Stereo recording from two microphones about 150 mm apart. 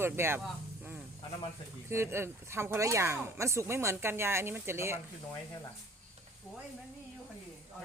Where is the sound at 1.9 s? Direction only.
15° right (ahead or behind).